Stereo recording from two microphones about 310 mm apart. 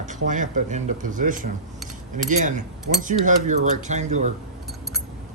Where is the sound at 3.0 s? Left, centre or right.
Right.